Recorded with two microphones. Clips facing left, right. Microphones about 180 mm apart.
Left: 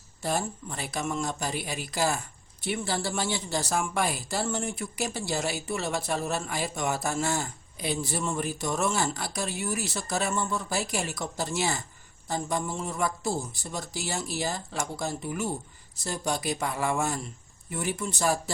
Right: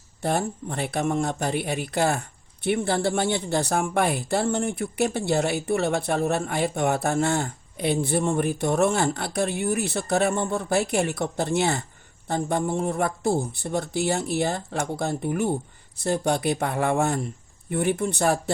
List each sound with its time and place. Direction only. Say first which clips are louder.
0.2 s speech: right 5 dB; 60° right (ahead or behind)